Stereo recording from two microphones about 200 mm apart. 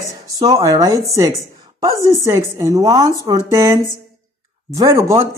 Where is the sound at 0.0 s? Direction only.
15° right (ahead or behind).